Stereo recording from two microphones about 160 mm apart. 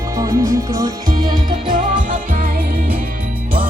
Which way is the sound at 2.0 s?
55° right (ahead or behind).